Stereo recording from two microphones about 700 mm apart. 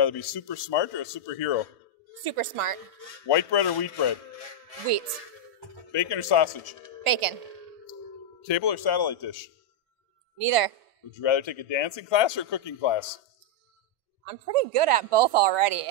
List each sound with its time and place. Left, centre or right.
0.0 s speech: left
2.2 s speech: right
3.3 s speech: left
5.9 s speech: left
7.1 s speech: right
8.5 s speech: left
10.4 s speech: right
11.1 s speech: left
14.5 s speech: right